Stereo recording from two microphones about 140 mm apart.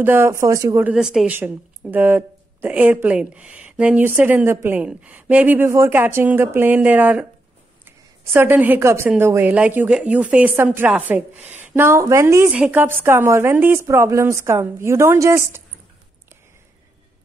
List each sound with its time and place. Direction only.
0.0 s speech: 15° right (ahead or behind)
0.8 s speech: 5° right (ahead or behind)
12.4 s speech: 5° right (ahead or behind)